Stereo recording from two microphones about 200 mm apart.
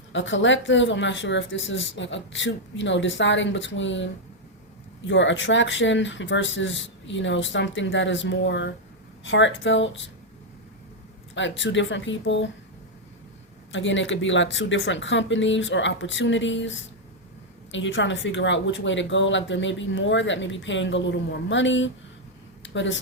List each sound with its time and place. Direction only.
0.1 s a woman's voice: 70° left (ahead or behind)
11.3 s a woman's voice: 70° left (ahead or behind)
13.7 s a woman's voice: 70° left (ahead or behind)
22.6 s a sound: 65° left (ahead or behind)